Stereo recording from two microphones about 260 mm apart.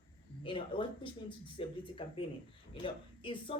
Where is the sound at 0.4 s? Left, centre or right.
Centre.